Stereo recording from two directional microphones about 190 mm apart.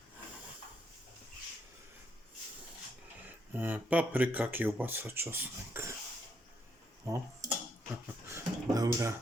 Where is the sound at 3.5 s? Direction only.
10° right (ahead or behind).